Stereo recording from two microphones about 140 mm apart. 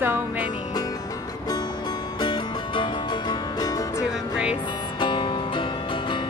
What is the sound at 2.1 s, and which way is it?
Music, 35° left (ahead or behind).